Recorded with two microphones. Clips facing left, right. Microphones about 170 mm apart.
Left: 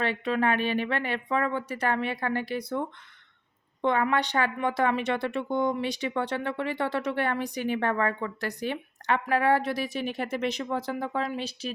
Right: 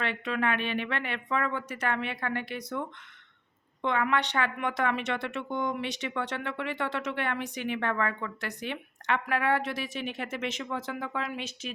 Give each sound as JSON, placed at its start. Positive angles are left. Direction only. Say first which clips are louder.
{"t": 0.0, "sound": "speech", "louder": "left 4 dB", "side_deg": 35}